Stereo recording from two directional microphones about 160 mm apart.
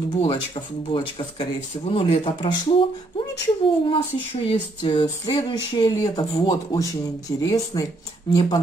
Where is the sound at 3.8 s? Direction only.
30° left (ahead or behind).